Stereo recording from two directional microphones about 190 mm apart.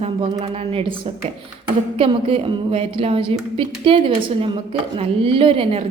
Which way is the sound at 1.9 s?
30° right (ahead or behind).